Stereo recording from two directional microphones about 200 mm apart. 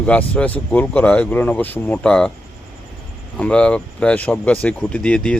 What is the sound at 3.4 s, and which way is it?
Speech, 5° left (ahead or behind).